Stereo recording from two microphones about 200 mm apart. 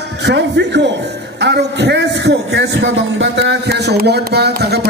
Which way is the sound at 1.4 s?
60° right (ahead or behind).